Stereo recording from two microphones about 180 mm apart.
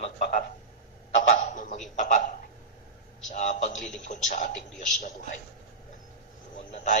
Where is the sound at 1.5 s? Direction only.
45° left (ahead or behind).